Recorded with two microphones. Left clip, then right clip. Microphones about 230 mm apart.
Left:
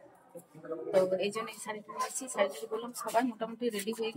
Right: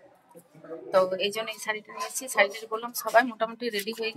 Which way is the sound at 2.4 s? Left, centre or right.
Right.